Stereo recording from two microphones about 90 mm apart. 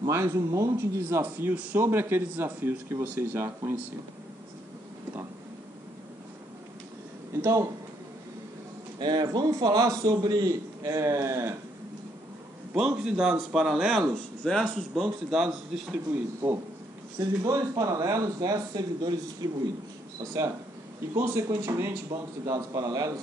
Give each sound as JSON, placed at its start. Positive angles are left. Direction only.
{"t": 0.0, "sound": "a man's voice", "side_deg": -35}
{"t": 1.2, "sound": "speech", "side_deg": -20}
{"t": 9.0, "sound": "a man's voice", "side_deg": -45}
{"t": 12.7, "sound": "speech", "side_deg": -10}
{"t": 15.3, "sound": "speech", "side_deg": -5}
{"t": 16.1, "sound": "speech", "side_deg": -25}
{"t": 17.2, "sound": "a man's voice", "side_deg": -40}
{"t": 21.1, "sound": "a man's voice", "side_deg": -30}